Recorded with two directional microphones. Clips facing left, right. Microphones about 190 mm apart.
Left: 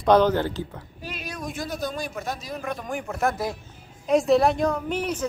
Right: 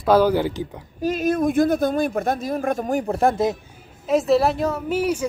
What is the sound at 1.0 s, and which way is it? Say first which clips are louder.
Speech: right 15 dB; 45° right (ahead or behind).